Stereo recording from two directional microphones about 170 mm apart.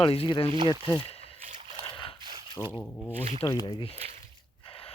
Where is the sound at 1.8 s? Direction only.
30° left (ahead or behind).